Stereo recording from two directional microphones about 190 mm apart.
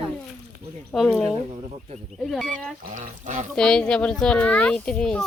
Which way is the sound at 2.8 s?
40° right (ahead or behind).